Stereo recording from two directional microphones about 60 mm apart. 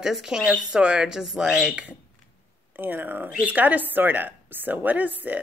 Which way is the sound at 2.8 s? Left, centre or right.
Right.